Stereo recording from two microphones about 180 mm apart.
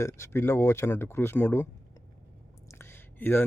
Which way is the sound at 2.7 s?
15° left (ahead or behind).